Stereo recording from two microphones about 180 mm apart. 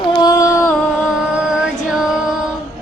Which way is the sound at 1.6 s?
5° right (ahead or behind).